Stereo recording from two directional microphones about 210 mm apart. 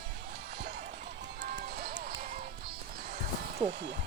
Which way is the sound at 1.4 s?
45° right (ahead or behind).